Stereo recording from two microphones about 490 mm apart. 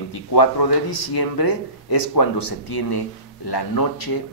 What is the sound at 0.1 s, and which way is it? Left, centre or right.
Speech, left.